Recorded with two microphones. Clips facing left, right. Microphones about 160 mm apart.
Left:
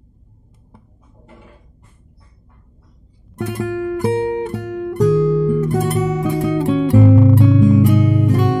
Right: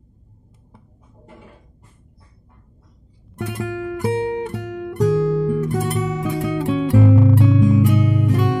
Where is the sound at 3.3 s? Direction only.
45° left (ahead or behind).